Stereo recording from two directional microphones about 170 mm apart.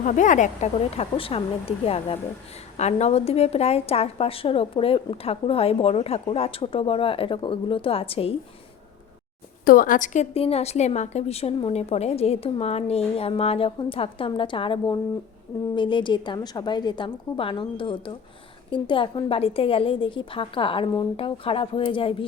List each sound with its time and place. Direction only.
0.0 s a woman's voice: 45° left (ahead or behind)
9.6 s a woman's voice: 55° left (ahead or behind); by 22.1 s 30° left (ahead or behind)